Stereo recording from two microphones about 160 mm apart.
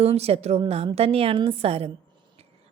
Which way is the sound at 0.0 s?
40° right (ahead or behind).